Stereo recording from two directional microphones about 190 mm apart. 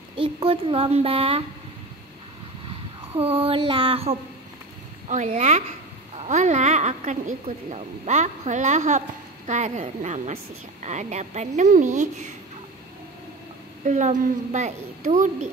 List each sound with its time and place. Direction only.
0.1 s a child's voice: 30° right (ahead or behind)
3.1 s a child's voice: 30° right (ahead or behind)
13.8 s a woman's voice: 40° right (ahead or behind)